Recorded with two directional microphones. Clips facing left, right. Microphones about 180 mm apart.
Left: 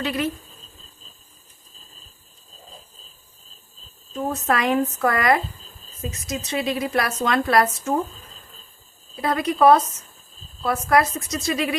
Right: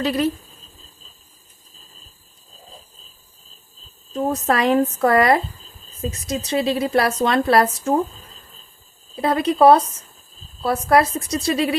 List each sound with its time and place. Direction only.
0.0 s a woman's voice: 35° right (ahead or behind)
4.1 s a woman's voice: 35° right (ahead or behind)